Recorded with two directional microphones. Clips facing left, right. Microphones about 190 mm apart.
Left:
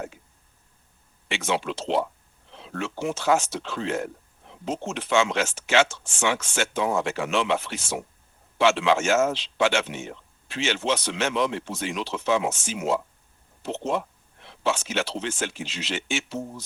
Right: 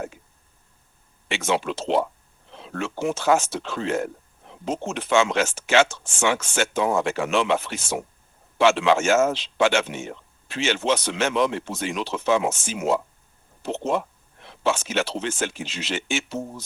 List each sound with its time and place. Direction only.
1.3 s speech: 45° right (ahead or behind)